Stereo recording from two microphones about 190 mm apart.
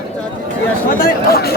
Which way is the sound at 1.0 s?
55° left (ahead or behind).